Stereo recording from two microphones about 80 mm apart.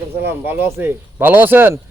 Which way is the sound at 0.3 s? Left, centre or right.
Right.